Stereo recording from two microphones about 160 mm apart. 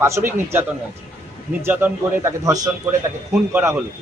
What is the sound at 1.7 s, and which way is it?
A man's voice, 10° right (ahead or behind).